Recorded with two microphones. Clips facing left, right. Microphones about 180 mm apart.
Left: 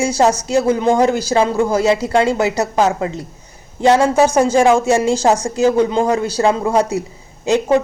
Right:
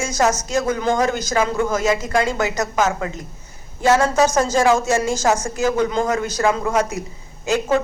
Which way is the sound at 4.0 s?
15° left (ahead or behind).